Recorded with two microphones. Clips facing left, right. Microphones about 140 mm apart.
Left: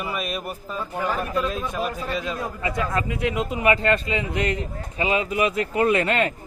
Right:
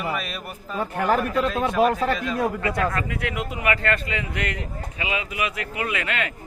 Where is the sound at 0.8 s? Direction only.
65° right (ahead or behind).